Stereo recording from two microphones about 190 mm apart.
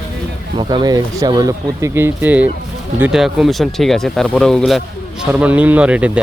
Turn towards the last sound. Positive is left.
turn(degrees=-5)  # may be behind; listen again after turning